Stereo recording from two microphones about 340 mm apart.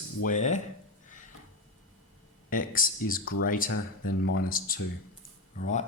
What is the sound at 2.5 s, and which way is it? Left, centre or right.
Speech, left.